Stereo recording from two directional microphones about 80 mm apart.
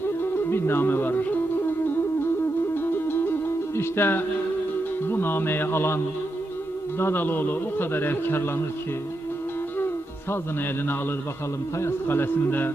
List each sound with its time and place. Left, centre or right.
0.2 s music: left
2.7 s music: left
3.8 s a man's voice: left
7.0 s a man's voice: left
11.8 s a man's voice: left